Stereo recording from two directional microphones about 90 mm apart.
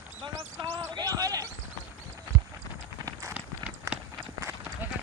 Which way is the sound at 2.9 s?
40° right (ahead or behind).